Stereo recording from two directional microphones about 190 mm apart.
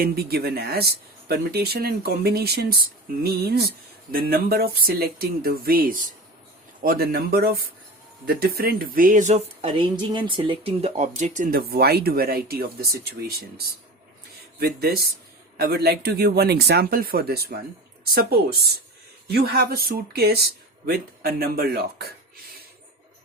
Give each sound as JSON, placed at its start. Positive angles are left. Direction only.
{"t": 0.0, "sound": "speech", "side_deg": -55}
{"t": 11.7, "sound": "speech", "side_deg": -55}
{"t": 14.6, "sound": "speech", "side_deg": -55}